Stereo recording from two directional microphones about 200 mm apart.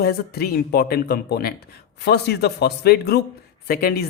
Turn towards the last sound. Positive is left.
turn(degrees=50)  # may be behind; listen again after turning